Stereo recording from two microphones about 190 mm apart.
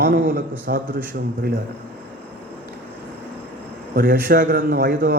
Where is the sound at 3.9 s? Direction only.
50° right (ahead or behind).